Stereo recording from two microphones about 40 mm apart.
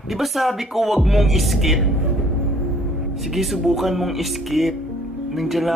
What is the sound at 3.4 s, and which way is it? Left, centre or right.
Speech, centre.